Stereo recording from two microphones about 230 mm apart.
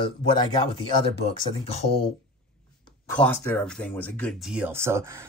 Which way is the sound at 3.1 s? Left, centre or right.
Centre.